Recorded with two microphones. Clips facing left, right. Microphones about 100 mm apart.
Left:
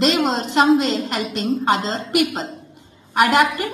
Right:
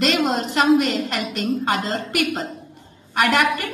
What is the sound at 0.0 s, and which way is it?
A woman's voice, 20° left (ahead or behind).